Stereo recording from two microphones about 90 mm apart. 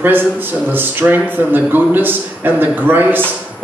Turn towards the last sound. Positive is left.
turn(degrees=-20)  # may be behind; listen again after turning